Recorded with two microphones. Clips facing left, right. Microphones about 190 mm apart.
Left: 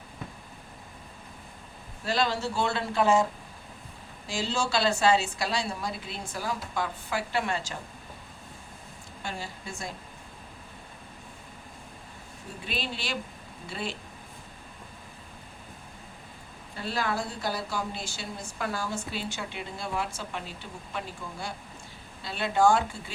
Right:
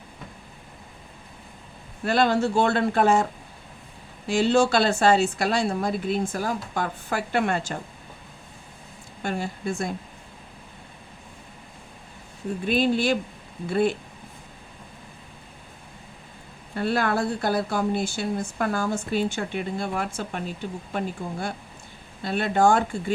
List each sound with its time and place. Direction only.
2.0 s speech: 55° right (ahead or behind)
4.3 s speech: 60° right (ahead or behind)
9.2 s speech: 55° right (ahead or behind)
12.6 s speech: 50° right (ahead or behind)
16.7 s speech: 55° right (ahead or behind)